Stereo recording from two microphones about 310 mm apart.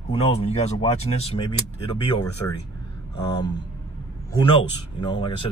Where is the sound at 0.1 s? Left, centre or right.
Centre.